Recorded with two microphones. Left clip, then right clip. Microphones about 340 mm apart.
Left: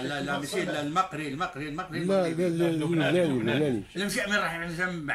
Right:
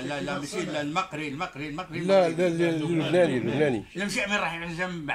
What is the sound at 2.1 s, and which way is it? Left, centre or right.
A man's voice, right.